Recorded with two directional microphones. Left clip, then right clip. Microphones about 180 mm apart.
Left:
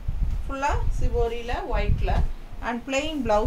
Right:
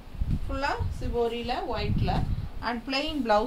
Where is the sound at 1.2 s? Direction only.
10° left (ahead or behind).